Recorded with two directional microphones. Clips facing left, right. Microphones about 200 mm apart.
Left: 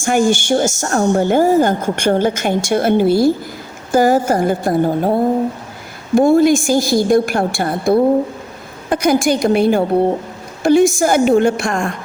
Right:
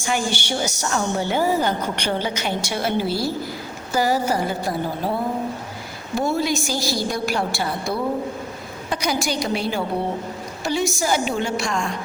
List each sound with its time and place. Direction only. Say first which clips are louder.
0.0 s a woman's voice: left 10 dB; 50° left (ahead or behind)